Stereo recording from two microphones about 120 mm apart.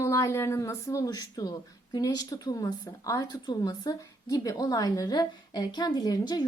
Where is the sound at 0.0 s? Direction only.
25° left (ahead or behind).